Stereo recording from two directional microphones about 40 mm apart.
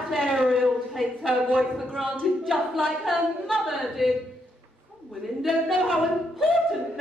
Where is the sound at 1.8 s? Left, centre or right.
Centre.